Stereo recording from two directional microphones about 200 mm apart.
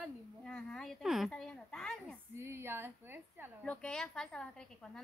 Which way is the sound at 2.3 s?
10° right (ahead or behind).